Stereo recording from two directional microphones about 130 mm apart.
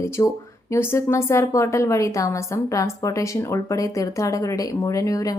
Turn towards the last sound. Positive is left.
turn(degrees=25)  # may be behind; listen again after turning